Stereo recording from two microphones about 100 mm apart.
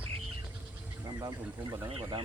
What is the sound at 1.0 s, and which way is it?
Speech, 40° right (ahead or behind).